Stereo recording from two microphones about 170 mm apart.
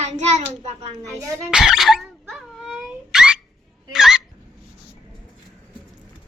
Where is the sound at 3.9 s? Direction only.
5° right (ahead or behind).